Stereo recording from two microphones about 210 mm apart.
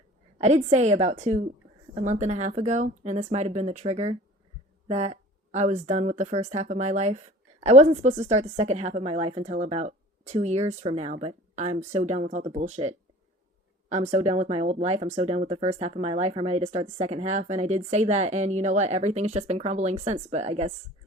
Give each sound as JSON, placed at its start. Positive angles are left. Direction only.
{"t": 0.3, "sound": "speech", "side_deg": -30}